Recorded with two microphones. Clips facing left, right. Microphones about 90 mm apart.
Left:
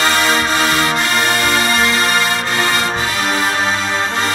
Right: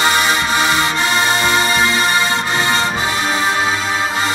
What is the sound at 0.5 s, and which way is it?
Music, 15° right (ahead or behind).